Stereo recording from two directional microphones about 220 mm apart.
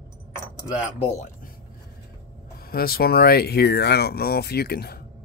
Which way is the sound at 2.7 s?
45° left (ahead or behind).